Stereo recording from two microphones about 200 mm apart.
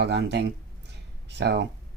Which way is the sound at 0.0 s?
60° right (ahead or behind).